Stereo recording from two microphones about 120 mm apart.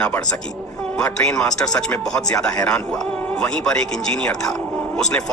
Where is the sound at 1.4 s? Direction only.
30° left (ahead or behind).